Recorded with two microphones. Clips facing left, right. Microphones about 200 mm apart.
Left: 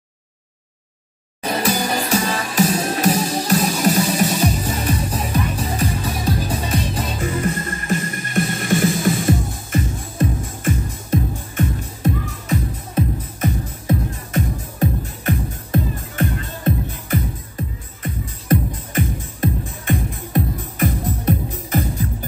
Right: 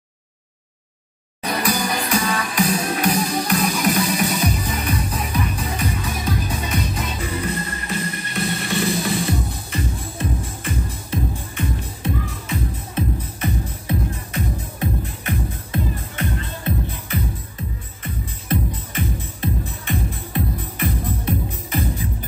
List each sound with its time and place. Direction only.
1.4 s music: 30° left (ahead or behind)
7.2 s music: 45° left (ahead or behind)